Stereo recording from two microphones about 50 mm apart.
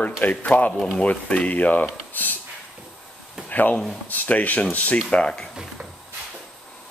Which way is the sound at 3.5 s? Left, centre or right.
Left.